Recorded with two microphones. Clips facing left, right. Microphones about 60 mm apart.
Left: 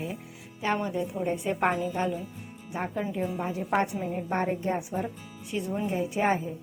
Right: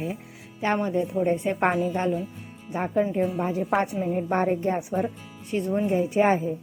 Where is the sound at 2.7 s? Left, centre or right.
Right.